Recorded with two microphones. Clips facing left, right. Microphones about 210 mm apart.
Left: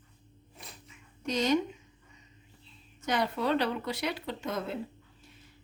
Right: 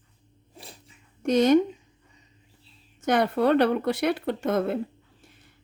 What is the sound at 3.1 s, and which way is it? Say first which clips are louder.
Speech: right 8 dB; 55° right (ahead or behind).